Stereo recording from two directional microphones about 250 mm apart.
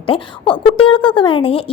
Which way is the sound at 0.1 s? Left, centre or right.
Centre.